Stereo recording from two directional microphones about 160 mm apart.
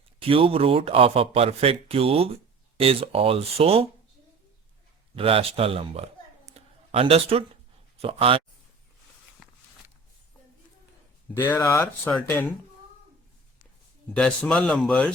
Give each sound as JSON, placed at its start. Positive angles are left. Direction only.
{"t": 0.2, "sound": "speech", "side_deg": -35}
{"t": 5.1, "sound": "speech", "side_deg": -35}
{"t": 6.5, "sound": "a sound", "side_deg": -40}
{"t": 7.9, "sound": "speech", "side_deg": -35}
{"t": 11.3, "sound": "speech", "side_deg": 15}
{"t": 14.2, "sound": "speech", "side_deg": 5}